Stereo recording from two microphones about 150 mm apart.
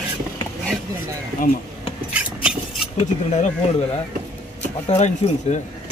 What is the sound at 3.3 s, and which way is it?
Speech, 50° left (ahead or behind).